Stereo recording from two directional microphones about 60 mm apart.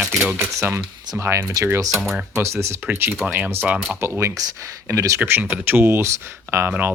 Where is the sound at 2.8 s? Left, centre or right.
Right.